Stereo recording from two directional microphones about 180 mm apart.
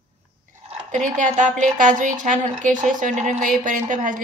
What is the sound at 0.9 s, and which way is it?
A woman's voice, 45° right (ahead or behind).